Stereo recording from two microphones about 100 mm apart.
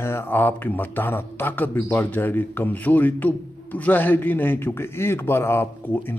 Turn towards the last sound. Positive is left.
turn(degrees=20)  # may be behind; listen again after turning